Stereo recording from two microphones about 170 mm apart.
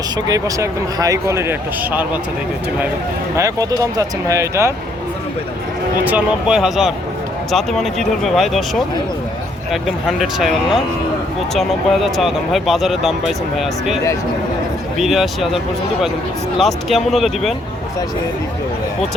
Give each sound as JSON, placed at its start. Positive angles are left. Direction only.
{"t": 0.3, "sound": "speech", "side_deg": -20}
{"t": 3.3, "sound": "speech", "side_deg": -20}
{"t": 6.1, "sound": "speech", "side_deg": -5}
{"t": 9.8, "sound": "speech", "side_deg": 0}